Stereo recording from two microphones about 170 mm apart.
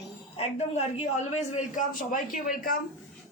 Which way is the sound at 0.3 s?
40° left (ahead or behind).